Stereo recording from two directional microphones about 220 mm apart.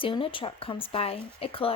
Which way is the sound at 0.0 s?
25° left (ahead or behind).